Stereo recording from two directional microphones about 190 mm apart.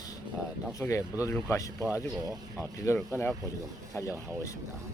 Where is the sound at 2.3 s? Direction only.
10° right (ahead or behind).